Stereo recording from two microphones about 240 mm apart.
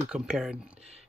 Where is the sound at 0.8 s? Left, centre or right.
Right.